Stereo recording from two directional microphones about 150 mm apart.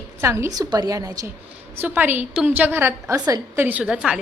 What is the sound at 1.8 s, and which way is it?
A woman's voice, 10° right (ahead or behind).